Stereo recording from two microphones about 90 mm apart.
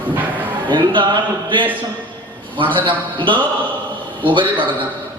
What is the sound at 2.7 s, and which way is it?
A man's voice, 65° right (ahead or behind).